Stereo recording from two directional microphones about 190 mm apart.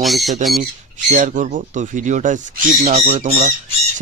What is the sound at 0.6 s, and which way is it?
Speech, 45° right (ahead or behind).